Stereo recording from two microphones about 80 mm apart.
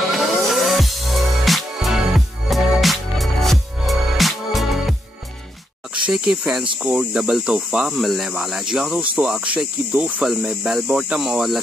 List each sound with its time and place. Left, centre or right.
0.5 s music: centre
6.0 s speech: centre
9.9 s speech: centre
10.2 s speech: centre